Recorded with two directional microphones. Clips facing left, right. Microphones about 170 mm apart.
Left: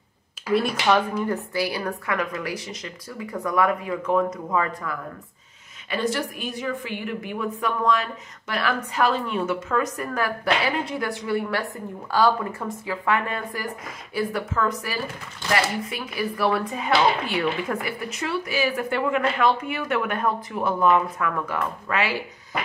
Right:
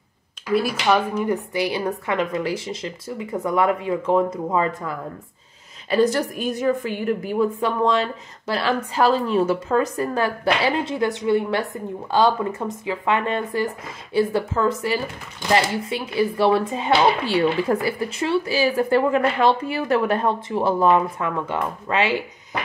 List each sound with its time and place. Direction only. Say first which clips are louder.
0.6 s speech: right 1 dB; 5° right (ahead or behind)
1.2 s speech: right 3 dB; 20° right (ahead or behind)
5.9 s a woman's voice: right 7 dB; 40° right (ahead or behind); by 22.6 s 25° right (ahead or behind)